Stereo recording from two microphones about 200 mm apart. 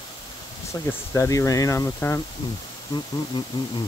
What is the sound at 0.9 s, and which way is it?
Speech, 15° left (ahead or behind).